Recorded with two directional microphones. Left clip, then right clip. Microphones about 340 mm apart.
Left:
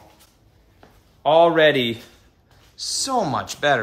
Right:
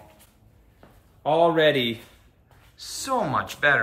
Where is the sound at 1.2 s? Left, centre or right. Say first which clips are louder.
Left 5 dB; centre.